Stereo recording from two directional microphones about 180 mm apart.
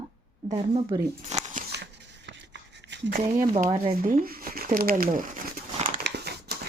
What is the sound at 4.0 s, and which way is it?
Speech, 45° right (ahead or behind).